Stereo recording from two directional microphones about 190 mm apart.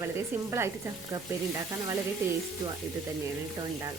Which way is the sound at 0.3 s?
10° right (ahead or behind).